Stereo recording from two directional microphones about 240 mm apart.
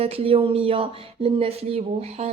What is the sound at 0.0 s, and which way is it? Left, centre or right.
Speech, right.